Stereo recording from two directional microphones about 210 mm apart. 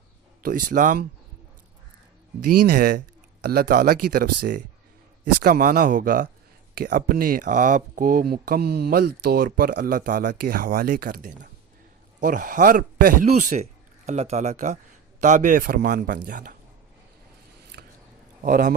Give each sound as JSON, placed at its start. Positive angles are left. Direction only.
{"t": 0.4, "sound": "a man's voice", "side_deg": -40}
{"t": 2.6, "sound": "a man's voice", "side_deg": -45}
{"t": 17.8, "sound": "a sound", "side_deg": -55}
{"t": 18.4, "sound": "a man's voice", "side_deg": -40}